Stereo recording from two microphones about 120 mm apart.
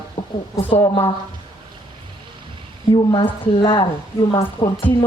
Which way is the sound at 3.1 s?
45° left (ahead or behind).